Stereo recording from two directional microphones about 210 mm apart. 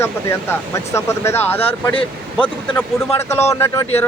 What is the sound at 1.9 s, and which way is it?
Speech, 25° left (ahead or behind).